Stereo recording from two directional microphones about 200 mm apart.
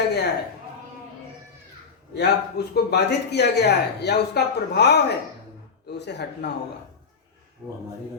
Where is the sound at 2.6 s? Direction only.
55° left (ahead or behind).